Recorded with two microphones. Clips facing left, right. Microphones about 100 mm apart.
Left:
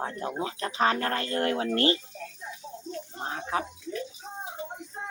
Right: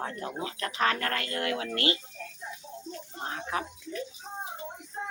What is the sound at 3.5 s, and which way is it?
Speech, 30° left (ahead or behind).